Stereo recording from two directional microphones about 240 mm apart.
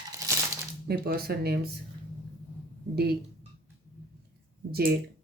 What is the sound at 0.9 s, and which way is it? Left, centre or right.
Speech, right.